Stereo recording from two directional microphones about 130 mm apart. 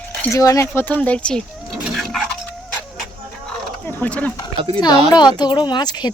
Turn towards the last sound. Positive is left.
turn(degrees=35)  # may be behind; listen again after turning